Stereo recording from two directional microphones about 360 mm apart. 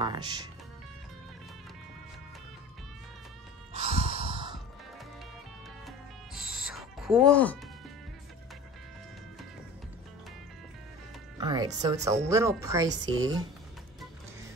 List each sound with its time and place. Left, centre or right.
0.0 s speech: centre
3.7 s music: centre
5.9 s owl: centre
11.3 s speech: centre